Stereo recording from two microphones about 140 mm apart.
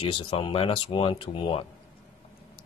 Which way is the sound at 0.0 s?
40° left (ahead or behind).